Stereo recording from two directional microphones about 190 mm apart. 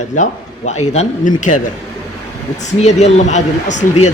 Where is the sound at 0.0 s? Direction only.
40° left (ahead or behind).